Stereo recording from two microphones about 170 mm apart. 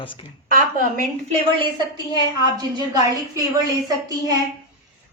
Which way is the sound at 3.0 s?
20° right (ahead or behind).